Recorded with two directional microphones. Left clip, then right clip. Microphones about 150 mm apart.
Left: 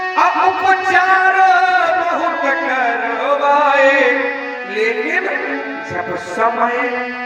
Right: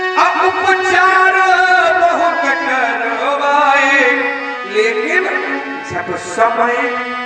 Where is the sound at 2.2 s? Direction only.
20° left (ahead or behind).